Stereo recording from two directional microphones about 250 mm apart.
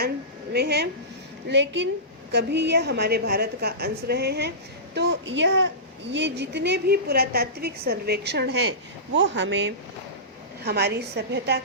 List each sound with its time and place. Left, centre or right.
0.5 s a woman's voice: right
2.3 s a woman's voice: right